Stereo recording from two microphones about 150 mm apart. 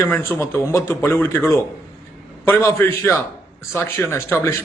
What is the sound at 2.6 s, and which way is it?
A man's voice, 20° left (ahead or behind).